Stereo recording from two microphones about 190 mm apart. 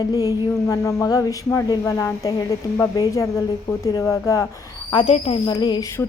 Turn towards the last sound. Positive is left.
turn(degrees=20)  # may be behind; listen again after turning